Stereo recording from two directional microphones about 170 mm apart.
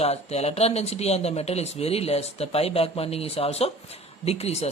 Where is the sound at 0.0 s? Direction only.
40° left (ahead or behind).